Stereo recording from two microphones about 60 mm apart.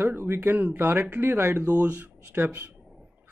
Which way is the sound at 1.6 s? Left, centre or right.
Right.